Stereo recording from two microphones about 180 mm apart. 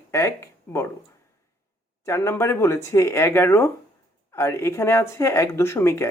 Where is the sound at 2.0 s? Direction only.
15° left (ahead or behind).